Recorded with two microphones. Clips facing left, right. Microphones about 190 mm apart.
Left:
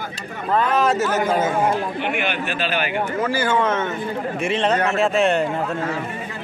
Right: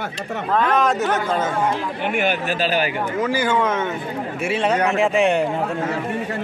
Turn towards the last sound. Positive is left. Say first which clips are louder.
# right 1 dB
turn(degrees=-15)  # may be behind; listen again after turning